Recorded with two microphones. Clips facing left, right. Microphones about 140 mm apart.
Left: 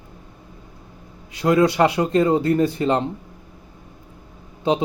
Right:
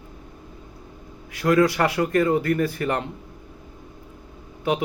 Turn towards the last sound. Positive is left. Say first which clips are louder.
# left 3 dB
turn(degrees=25)  # may be behind; listen again after turning